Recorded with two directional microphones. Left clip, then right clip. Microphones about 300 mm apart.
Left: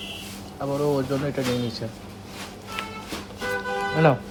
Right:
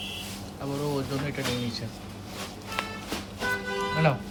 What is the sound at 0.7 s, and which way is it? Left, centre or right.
Speech, left.